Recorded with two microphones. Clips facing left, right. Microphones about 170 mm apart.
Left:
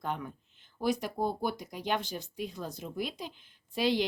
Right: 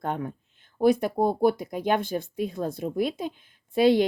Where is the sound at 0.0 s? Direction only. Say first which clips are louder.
Right 6 dB; 55° right (ahead or behind).